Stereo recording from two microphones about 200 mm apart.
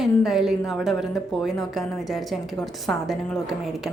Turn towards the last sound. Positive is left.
turn(degrees=0)  # may be behind; listen again after turning